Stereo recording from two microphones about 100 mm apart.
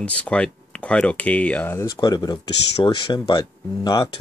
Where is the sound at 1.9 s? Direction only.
45° left (ahead or behind).